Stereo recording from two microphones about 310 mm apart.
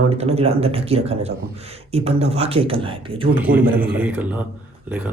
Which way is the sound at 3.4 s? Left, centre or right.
Centre.